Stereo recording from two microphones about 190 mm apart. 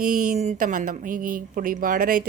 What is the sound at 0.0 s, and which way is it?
A woman's voice, 45° right (ahead or behind).